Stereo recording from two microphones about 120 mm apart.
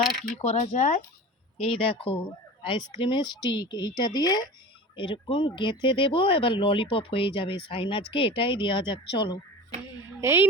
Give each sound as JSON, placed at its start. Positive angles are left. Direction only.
{"t": 0.3, "sound": "speech", "side_deg": 75}
{"t": 1.6, "sound": "speech", "side_deg": 50}
{"t": 2.6, "sound": "speech", "side_deg": 40}
{"t": 10.2, "sound": "a woman's voice", "side_deg": -20}